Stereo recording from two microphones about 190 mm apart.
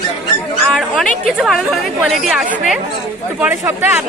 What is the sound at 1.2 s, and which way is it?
Speech, centre (ahead or behind).